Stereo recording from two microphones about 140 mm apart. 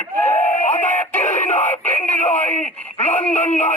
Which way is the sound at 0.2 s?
20° left (ahead or behind).